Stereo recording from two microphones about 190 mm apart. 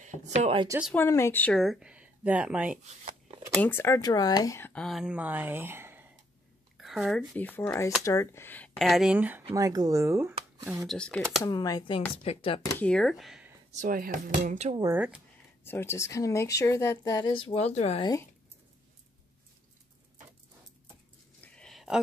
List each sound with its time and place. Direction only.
0.0 s speech: 40° right (ahead or behind)
0.9 s speech: 15° left (ahead or behind); by 2.8 s 5° right (ahead or behind)
2.8 s shuffling cards: 30° right (ahead or behind)
3.6 s speech: 15° left (ahead or behind); by 9.4 s 10° right (ahead or behind)
9.5 s speech: 20° right (ahead or behind)
10.9 s speech: 5° left (ahead or behind)
11.4 s speech: 20° left (ahead or behind)
12.7 s speech: 5° left (ahead or behind)
13.7 s speech: 45° right (ahead or behind)
15.0 s speech: 5° right (ahead or behind)
15.6 s speech: 10° left (ahead or behind); by 18.0 s 35° left (ahead or behind)
21.4 s a sound: 5° left (ahead or behind)